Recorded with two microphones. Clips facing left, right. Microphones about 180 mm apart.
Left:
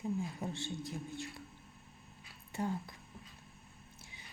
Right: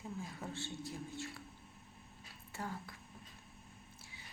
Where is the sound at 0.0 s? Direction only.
15° left (ahead or behind).